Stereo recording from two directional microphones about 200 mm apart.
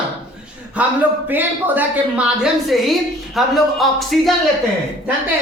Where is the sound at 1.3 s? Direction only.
10° right (ahead or behind).